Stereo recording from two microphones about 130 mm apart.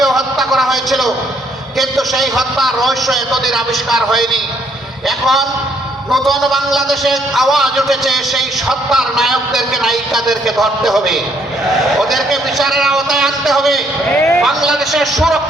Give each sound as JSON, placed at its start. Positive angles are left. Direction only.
{"t": 0.0, "sound": "a sound", "side_deg": 0}
{"t": 1.8, "sound": "a man's voice", "side_deg": 0}
{"t": 14.1, "sound": "a man's voice", "side_deg": 15}
{"t": 14.4, "sound": "a man's voice", "side_deg": 0}